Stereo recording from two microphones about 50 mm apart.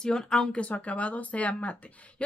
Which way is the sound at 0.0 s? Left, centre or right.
Centre.